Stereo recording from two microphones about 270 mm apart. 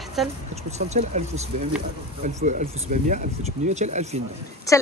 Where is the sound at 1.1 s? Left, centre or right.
Right.